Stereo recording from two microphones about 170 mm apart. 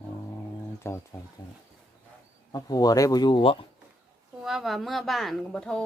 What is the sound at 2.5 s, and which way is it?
Speech, 20° left (ahead or behind).